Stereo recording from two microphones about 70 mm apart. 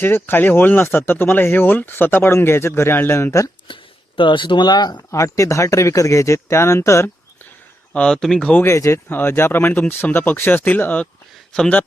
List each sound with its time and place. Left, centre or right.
0.0 s speech: left
4.6 s speech: left
5.1 s speech: left
7.9 s speech: centre
8.6 s speech: left
9.0 s speech: left